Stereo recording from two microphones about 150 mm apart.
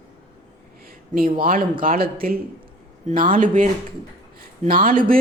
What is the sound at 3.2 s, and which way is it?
Speech, 65° right (ahead or behind).